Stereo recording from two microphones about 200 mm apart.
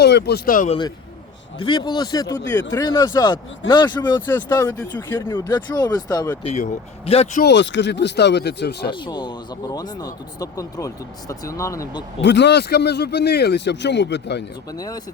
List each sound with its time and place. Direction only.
0.0 s speech: 55° left (ahead or behind)
1.6 s speech: 25° left (ahead or behind)
6.4 s speech: 30° left (ahead or behind)
7.4 s speech: 65° left (ahead or behind)
8.9 s speech: 20° left (ahead or behind)
12.2 s speech: 60° left (ahead or behind)
14.8 s speech: 20° left (ahead or behind)